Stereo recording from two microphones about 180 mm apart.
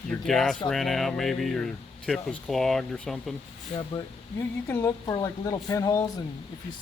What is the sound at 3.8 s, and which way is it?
Speech, 15° left (ahead or behind).